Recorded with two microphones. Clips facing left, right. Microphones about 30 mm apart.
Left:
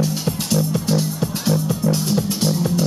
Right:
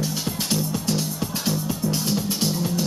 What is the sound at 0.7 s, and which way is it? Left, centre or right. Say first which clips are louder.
Music: left 5 dB; centre.